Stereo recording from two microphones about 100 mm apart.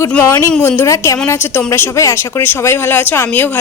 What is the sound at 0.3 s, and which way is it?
A woman's voice, 30° left (ahead or behind).